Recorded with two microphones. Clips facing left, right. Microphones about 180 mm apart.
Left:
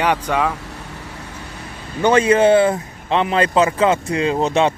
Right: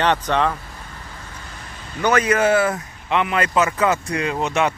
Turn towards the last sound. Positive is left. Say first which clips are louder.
# left 4 dB
turn(degrees=30)  # may be behind; listen again after turning